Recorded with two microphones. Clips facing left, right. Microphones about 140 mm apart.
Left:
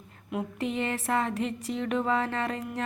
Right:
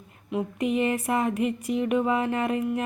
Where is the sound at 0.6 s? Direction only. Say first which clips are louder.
Right 6 dB; 15° right (ahead or behind).